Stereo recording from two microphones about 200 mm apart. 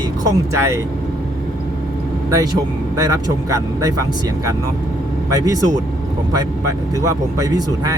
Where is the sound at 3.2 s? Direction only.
15° right (ahead or behind).